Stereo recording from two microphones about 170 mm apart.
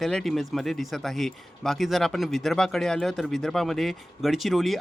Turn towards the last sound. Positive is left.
turn(degrees=0)  # may be behind; listen again after turning